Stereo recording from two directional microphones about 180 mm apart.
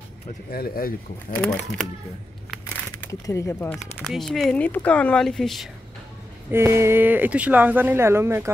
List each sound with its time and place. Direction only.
0.5 s speech: 55° left (ahead or behind)
1.3 s speech: 5° left (ahead or behind)
3.0 s speech: 15° left (ahead or behind)
3.7 s speech: centre (ahead or behind)
6.5 s speech: 15° right (ahead or behind)